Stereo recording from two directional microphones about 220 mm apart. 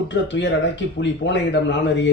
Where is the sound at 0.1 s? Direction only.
55° left (ahead or behind).